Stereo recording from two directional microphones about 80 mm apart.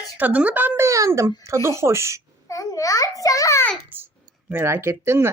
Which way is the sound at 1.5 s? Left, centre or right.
Right.